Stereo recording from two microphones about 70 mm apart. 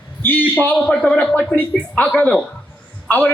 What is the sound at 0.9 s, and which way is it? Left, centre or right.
A man's voice, centre.